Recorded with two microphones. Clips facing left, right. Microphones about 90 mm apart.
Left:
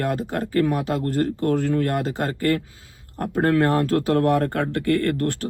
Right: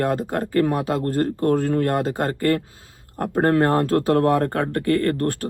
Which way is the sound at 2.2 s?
35° right (ahead or behind).